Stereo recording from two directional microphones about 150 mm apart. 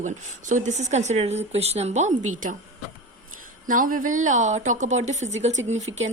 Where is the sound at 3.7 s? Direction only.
65° right (ahead or behind).